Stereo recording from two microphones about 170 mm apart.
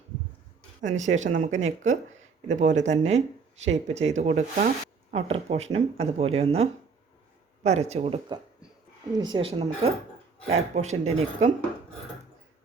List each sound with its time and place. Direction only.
0.8 s speech: 45° right (ahead or behind)